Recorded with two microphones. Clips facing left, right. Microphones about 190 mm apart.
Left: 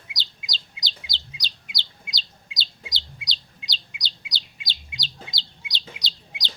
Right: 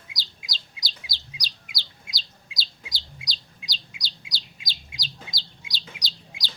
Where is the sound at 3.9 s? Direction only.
Centre (ahead or behind).